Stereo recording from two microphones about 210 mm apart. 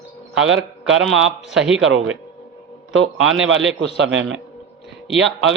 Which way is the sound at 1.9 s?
75° right (ahead or behind).